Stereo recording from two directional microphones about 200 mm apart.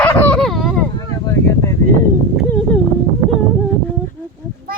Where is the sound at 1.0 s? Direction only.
15° left (ahead or behind).